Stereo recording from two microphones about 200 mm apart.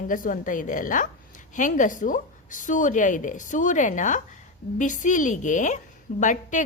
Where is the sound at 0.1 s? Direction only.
40° left (ahead or behind).